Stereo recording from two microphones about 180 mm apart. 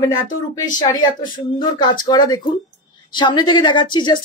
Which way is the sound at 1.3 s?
25° left (ahead or behind).